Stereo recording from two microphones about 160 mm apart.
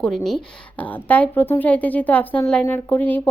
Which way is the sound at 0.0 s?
5° left (ahead or behind).